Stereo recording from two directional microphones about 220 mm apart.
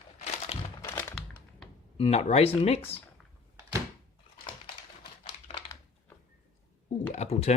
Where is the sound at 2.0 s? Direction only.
30° left (ahead or behind).